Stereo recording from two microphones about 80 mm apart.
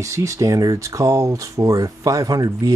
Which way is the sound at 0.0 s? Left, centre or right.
Right.